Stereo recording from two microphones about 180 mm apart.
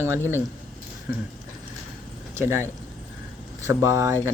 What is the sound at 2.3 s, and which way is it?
Speech, 15° right (ahead or behind).